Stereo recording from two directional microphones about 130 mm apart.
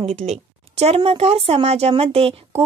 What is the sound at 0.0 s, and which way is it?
A woman's voice, 55° right (ahead or behind).